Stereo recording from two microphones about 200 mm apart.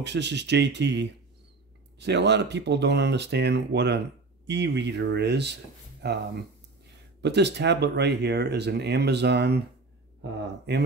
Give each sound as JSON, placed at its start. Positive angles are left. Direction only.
{"t": 0.0, "sound": "speech", "side_deg": -60}
{"t": 7.2, "sound": "speech", "side_deg": -60}